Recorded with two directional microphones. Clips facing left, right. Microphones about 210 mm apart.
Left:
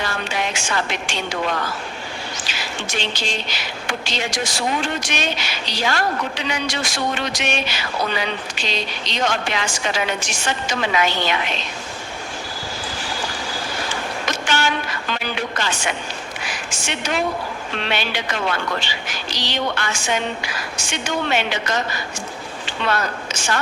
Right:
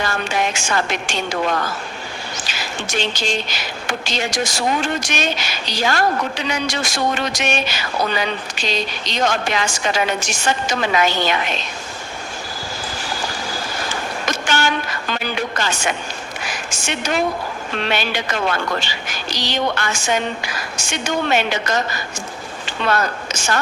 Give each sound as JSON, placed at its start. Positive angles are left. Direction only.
{"t": 0.0, "sound": "a woman's voice", "side_deg": -45}
{"t": 2.4, "sound": "a woman's voice", "side_deg": -45}
{"t": 14.3, "sound": "a sound", "side_deg": -45}
{"t": 15.1, "sound": "music", "side_deg": -45}
{"t": 16.4, "sound": "a sound", "side_deg": -45}
{"t": 17.8, "sound": "a woman's voice", "side_deg": -45}